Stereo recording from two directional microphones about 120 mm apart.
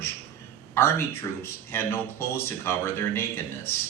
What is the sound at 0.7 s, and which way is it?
A man's voice, 20° left (ahead or behind).